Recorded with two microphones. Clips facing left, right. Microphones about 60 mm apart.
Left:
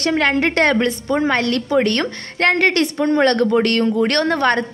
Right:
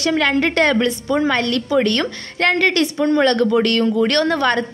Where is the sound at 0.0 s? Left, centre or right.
Left.